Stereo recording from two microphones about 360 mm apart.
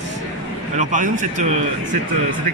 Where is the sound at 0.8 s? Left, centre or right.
Right.